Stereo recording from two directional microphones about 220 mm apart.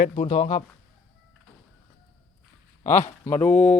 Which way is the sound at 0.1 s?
25° left (ahead or behind).